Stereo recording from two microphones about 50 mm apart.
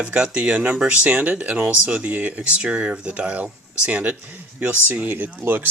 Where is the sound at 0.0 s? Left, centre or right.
Right.